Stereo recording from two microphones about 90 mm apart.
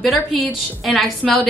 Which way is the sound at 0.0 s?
Centre (ahead or behind).